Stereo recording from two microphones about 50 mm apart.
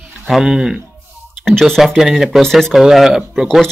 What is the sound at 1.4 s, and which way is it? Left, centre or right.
Speech, centre.